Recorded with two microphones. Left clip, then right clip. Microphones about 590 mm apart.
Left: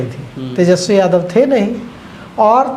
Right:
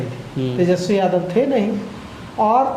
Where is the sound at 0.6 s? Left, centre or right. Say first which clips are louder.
Left 7 dB; left.